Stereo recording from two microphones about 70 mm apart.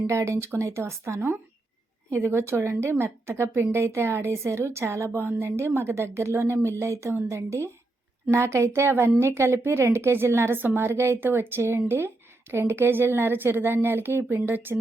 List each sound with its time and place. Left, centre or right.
0.1 s a woman's voice: right